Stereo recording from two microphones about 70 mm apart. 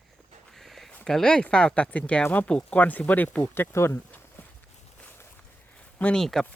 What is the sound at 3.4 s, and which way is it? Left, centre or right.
Speech, left.